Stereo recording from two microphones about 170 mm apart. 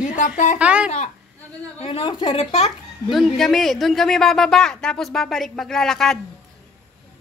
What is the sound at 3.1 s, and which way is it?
A woman's voice, centre (ahead or behind).